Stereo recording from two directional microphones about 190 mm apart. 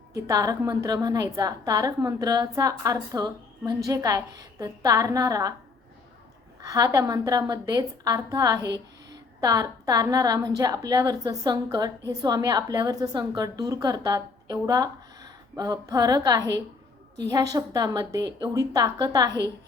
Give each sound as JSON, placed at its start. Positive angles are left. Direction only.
{"t": 0.1, "sound": "a woman's voice", "side_deg": -15}
{"t": 6.6, "sound": "a woman's voice", "side_deg": -20}